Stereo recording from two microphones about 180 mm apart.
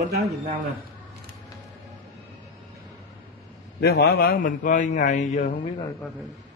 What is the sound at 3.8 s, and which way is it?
A man's voice, 60° left (ahead or behind).